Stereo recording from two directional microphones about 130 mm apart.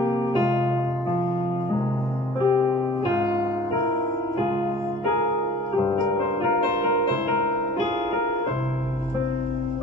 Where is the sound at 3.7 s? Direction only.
40° left (ahead or behind).